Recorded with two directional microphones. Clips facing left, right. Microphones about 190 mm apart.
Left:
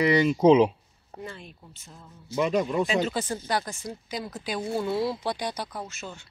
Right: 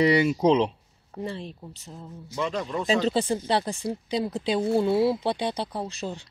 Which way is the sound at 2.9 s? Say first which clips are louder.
Right 4 dB; 30° right (ahead or behind).